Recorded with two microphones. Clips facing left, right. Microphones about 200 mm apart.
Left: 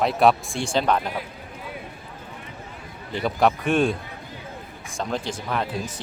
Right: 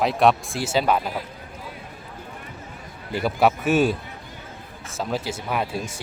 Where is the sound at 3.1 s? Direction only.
5° right (ahead or behind).